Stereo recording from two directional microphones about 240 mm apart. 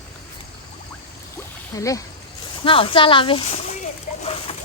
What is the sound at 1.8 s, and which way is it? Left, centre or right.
Speech, centre.